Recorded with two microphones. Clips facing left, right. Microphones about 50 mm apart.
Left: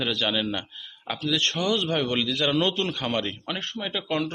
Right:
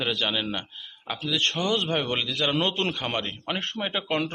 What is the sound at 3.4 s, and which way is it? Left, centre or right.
Speech, right.